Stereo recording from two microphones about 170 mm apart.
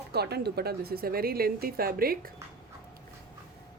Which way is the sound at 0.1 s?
70° right (ahead or behind).